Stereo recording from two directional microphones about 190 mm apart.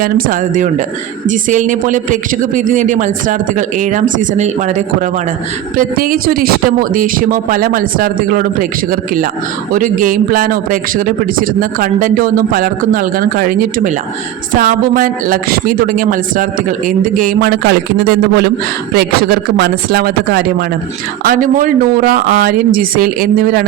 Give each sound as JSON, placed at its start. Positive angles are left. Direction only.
{"t": 0.0, "sound": "a man's voice", "side_deg": -45}